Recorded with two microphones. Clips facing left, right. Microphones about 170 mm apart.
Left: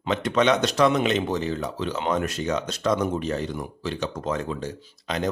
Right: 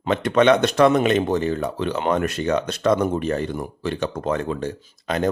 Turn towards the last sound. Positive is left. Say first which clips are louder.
# right 5 dB
turn(degrees=-55)  # may be behind; listen again after turning